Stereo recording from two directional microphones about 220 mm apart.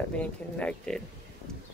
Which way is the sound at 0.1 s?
5° left (ahead or behind).